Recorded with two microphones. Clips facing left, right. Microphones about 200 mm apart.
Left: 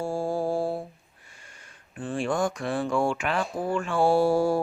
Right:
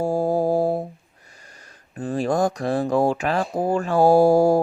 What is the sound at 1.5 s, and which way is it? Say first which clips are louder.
Speech: right 3 dB; 40° right (ahead or behind).